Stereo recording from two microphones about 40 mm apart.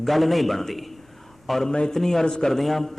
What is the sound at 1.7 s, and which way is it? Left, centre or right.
Speech, centre.